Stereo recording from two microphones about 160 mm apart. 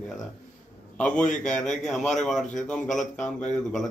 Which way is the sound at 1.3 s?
50° left (ahead or behind).